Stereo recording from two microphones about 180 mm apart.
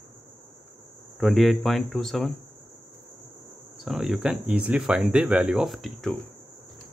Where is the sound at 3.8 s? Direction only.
Centre (ahead or behind).